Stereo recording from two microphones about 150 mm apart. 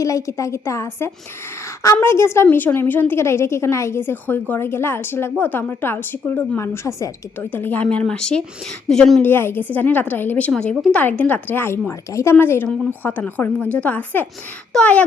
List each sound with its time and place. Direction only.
0.0 s a woman's voice: 20° left (ahead or behind); by 9.2 s centre (ahead or behind)
9.2 s a woman's voice: 15° left (ahead or behind)